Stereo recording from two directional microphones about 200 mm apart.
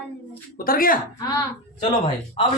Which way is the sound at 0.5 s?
45° left (ahead or behind).